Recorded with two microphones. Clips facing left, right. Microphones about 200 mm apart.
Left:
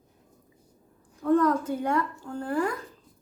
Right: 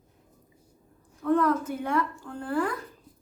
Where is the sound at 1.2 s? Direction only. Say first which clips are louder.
Left 2 dB; 35° left (ahead or behind).